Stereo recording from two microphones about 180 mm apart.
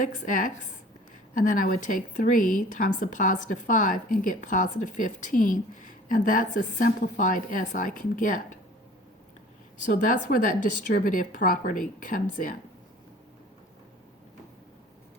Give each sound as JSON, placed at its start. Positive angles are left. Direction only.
{"t": 0.0, "sound": "speech", "side_deg": 50}
{"t": 9.8, "sound": "speech", "side_deg": 45}